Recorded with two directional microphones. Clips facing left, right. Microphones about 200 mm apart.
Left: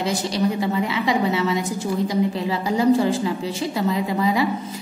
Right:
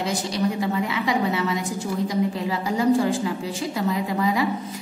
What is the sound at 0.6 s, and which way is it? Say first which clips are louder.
A woman's voice: left 2 dB; 25° left (ahead or behind).